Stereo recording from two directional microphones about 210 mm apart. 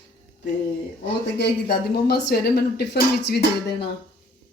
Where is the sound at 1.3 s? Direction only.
50° left (ahead or behind).